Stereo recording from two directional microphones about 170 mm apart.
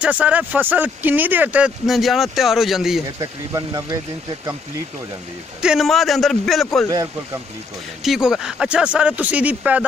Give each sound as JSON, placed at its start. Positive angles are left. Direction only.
{"t": 0.0, "sound": "speech", "side_deg": -10}
{"t": 3.2, "sound": "speech", "side_deg": -20}
{"t": 5.6, "sound": "speech", "side_deg": -5}
{"t": 8.0, "sound": "speech", "side_deg": 0}